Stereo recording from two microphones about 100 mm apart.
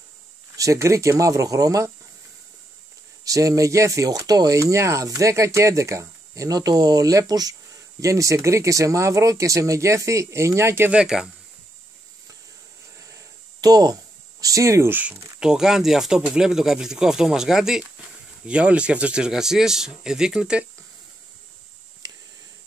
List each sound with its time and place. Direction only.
0.6 s speech: 30° right (ahead or behind)
3.3 s speech: 35° right (ahead or behind)
10.9 s speech: 5° right (ahead or behind)
13.0 s a sound: 35° right (ahead or behind)
14.4 s speech: 35° right (ahead or behind)
14.9 s speech: 15° right (ahead or behind)